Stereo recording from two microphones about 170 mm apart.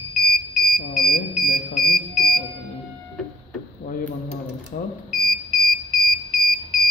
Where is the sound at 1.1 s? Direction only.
60° left (ahead or behind).